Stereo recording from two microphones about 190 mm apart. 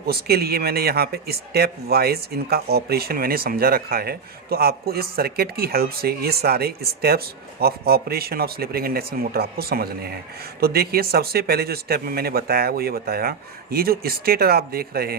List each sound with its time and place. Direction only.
0.1 s a man's voice: 55° right (ahead or behind)